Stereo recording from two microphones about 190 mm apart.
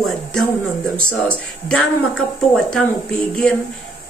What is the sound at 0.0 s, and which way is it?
Speech, centre (ahead or behind).